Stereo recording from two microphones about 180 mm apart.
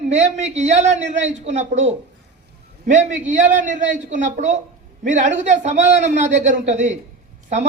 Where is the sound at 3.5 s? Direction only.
45° right (ahead or behind).